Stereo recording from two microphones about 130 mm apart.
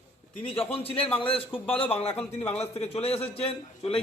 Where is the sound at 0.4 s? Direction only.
45° left (ahead or behind).